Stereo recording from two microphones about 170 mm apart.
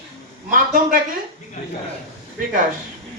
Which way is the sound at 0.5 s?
55° right (ahead or behind).